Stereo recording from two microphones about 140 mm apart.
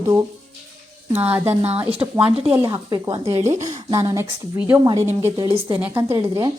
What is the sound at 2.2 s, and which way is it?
Speech, 40° right (ahead or behind).